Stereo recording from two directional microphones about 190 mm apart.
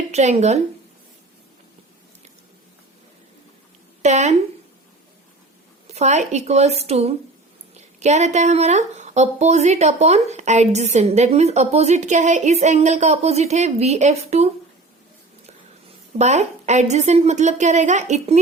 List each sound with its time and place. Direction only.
0.1 s a woman's voice: 35° right (ahead or behind)
4.0 s a woman's voice: 35° right (ahead or behind)
5.9 s a woman's voice: 35° right (ahead or behind)
16.1 s a woman's voice: 35° right (ahead or behind)